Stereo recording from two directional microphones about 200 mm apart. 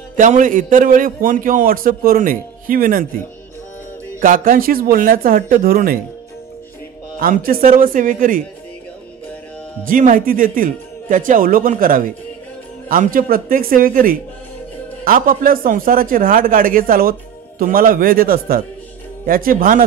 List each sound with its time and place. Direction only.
0.1 s a man's voice: 40° right (ahead or behind)
4.2 s a man's voice: 45° right (ahead or behind)
7.2 s a man's voice: 45° right (ahead or behind)
9.8 s a man's voice: 45° right (ahead or behind)